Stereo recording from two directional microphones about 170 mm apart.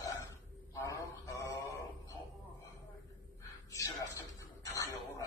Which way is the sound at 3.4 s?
20° left (ahead or behind).